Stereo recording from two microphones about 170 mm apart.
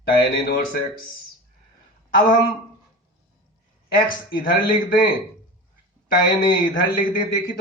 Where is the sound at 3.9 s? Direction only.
55° left (ahead or behind).